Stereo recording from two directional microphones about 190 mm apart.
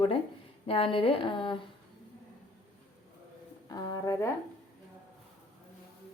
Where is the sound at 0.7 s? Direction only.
30° left (ahead or behind).